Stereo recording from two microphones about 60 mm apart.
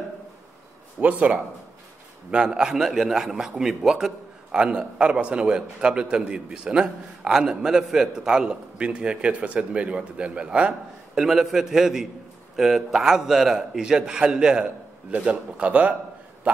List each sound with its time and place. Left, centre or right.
1.0 s a man's voice: right
11.1 s a man's voice: centre; by 16.6 s right